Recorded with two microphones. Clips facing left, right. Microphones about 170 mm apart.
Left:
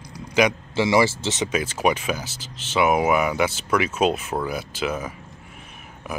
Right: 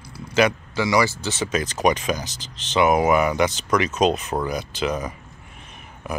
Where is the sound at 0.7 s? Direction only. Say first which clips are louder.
Left 3 dB; 25° left (ahead or behind).